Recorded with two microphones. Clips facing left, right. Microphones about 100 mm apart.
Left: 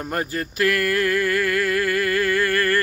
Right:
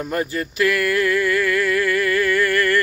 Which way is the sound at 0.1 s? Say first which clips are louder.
Right 1 dB; 40° left (ahead or behind).